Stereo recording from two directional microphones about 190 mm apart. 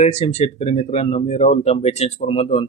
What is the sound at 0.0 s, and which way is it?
Speech, 35° left (ahead or behind).